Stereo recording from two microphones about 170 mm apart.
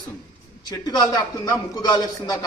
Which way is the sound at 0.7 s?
25° left (ahead or behind).